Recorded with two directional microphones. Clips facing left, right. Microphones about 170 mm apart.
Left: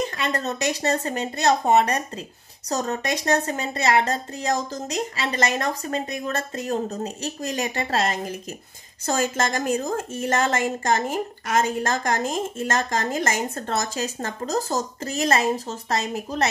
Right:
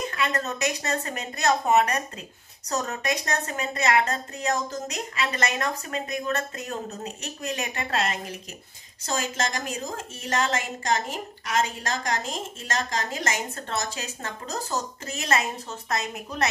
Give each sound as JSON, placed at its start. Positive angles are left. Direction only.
{"t": 0.0, "sound": "a woman's voice", "side_deg": 30}
{"t": 9.0, "sound": "a woman's voice", "side_deg": 50}